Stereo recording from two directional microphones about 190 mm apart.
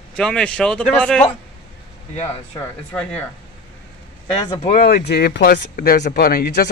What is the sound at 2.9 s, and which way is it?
Speech, 5° left (ahead or behind).